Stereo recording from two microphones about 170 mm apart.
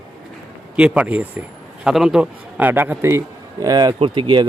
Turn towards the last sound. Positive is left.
turn(degrees=-30)  # may be behind; listen again after turning